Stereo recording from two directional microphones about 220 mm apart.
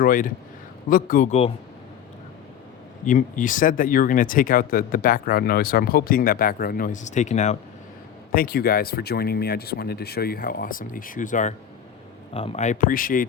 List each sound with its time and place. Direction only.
0.0 s speech: 40° left (ahead or behind)
3.0 s speech: 35° left (ahead or behind)
8.3 s speech: 45° left (ahead or behind)